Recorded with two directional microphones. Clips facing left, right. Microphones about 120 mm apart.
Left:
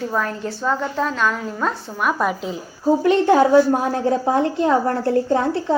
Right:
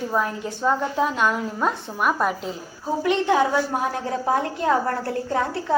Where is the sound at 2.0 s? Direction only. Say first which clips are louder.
Left 2 dB; centre (ahead or behind).